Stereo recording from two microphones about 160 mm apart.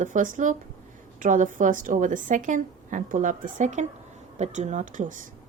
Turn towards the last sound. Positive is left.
turn(degrees=-55)  # may be behind; listen again after turning